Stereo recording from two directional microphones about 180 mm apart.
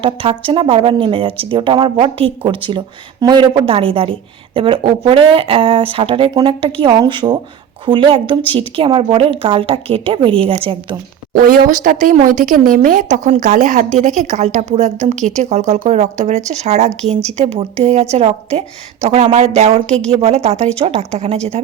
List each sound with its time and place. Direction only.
0.0 s speech: 30° right (ahead or behind)
11.4 s a woman's voice: 50° right (ahead or behind)